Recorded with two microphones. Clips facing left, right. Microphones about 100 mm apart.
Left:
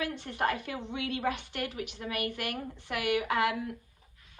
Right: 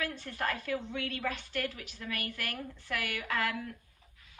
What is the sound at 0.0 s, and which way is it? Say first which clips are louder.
Speech: left 4 dB; 20° left (ahead or behind).